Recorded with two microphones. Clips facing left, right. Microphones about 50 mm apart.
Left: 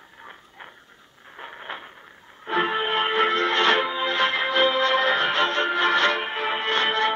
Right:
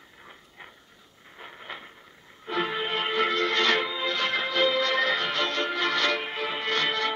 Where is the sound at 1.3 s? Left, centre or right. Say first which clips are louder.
Left 5 dB; left.